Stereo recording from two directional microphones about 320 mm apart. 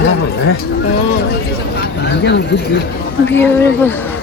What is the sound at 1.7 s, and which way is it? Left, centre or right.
Speech, left.